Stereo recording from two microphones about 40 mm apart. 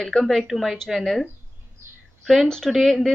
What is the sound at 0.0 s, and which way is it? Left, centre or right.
Speech, centre.